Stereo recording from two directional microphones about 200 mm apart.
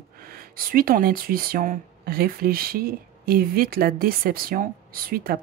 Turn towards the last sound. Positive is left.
turn(degrees=-45)  # may be behind; listen again after turning